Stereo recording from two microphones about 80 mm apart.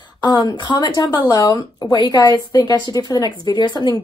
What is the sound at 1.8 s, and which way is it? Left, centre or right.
Speech, left.